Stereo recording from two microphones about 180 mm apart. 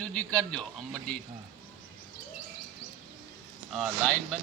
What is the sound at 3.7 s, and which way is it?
Speech, centre (ahead or behind).